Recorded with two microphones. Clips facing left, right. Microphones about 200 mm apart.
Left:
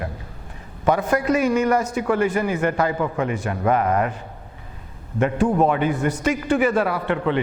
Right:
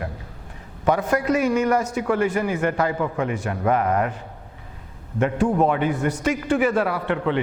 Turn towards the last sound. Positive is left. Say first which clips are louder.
# left 1 dB
turn(degrees=15)  # may be behind; listen again after turning